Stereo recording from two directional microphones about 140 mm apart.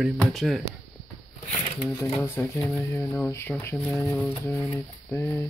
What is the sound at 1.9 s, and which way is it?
Speech, 15° left (ahead or behind).